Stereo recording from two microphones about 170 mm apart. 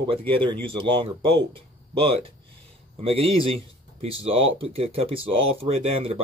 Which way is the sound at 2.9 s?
35° right (ahead or behind).